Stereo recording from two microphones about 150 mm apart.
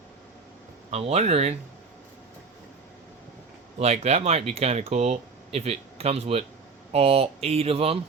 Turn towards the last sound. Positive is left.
turn(degrees=-40)  # may be behind; listen again after turning